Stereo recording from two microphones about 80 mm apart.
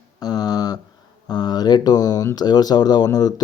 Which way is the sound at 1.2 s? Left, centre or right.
Left.